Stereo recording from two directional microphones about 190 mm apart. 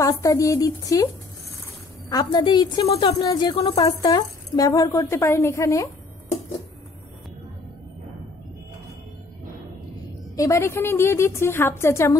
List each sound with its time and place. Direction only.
0.0 s a woman's voice: 15° left (ahead or behind)
2.0 s speech: 20° left (ahead or behind)
10.3 s a woman's voice: 15° left (ahead or behind)